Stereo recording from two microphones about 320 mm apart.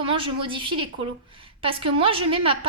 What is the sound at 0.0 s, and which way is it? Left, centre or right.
A woman's voice, centre.